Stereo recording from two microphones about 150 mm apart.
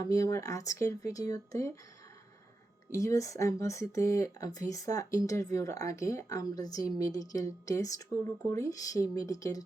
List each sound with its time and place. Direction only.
0.0 s speech: 20° left (ahead or behind)
2.9 s speech: 20° left (ahead or behind)